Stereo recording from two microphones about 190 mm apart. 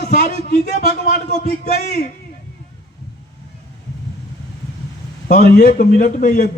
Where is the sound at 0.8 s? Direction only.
55° left (ahead or behind).